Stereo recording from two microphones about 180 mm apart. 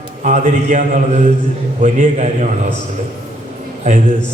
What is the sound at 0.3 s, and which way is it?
A man's voice, 45° right (ahead or behind).